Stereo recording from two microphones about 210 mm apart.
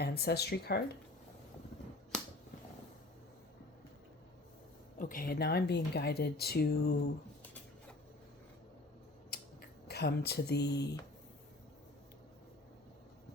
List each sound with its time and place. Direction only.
0.0 s speech: 50° left (ahead or behind)
4.9 s speech: 40° left (ahead or behind)
9.3 s a sound: 50° left (ahead or behind)